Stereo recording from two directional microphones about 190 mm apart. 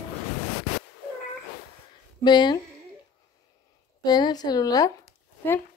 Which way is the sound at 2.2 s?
20° left (ahead or behind).